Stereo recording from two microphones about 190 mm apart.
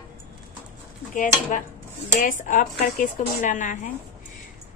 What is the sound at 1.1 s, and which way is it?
Speech, 45° left (ahead or behind).